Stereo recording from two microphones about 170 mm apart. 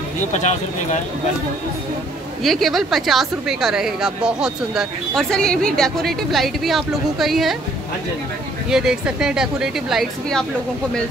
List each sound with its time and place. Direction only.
0.3 s speech: 45° left (ahead or behind)
2.4 s a woman's voice: centre (ahead or behind)
8.6 s a woman's voice: 5° right (ahead or behind)